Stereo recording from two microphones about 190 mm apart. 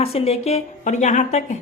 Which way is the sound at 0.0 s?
30° left (ahead or behind).